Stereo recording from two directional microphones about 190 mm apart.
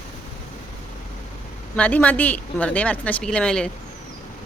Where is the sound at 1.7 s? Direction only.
5° left (ahead or behind).